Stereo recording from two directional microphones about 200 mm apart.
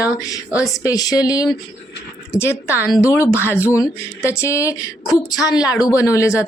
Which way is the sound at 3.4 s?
10° left (ahead or behind).